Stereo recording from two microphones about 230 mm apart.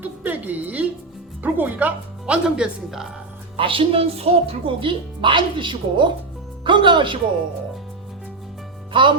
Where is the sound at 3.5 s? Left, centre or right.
Right.